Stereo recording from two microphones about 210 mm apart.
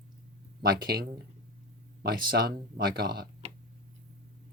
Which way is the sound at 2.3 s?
45° right (ahead or behind).